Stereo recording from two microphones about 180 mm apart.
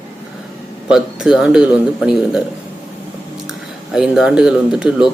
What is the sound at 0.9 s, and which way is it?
Speech, 5° right (ahead or behind).